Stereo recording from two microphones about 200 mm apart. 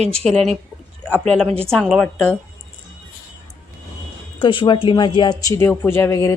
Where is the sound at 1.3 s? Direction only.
5° left (ahead or behind).